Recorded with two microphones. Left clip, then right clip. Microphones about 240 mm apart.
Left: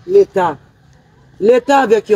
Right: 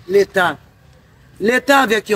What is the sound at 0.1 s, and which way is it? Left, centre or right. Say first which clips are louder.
Speech: left 3 dB; centre.